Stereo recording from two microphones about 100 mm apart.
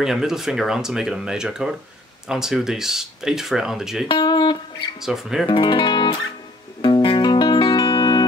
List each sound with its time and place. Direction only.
0.0 s speech: 5° right (ahead or behind)
4.1 s guitar: 50° left (ahead or behind)
5.0 s speech: 5° right (ahead or behind)
5.5 s speech: 50° left (ahead or behind)
6.8 s music: 55° left (ahead or behind)